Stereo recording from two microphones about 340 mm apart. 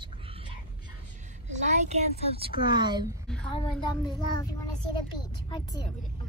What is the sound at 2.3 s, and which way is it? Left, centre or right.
Speech, centre.